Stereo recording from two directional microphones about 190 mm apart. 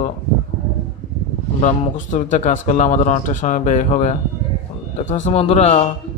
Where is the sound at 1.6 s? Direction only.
40° left (ahead or behind).